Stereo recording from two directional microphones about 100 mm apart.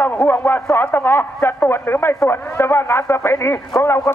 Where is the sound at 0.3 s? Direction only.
20° left (ahead or behind).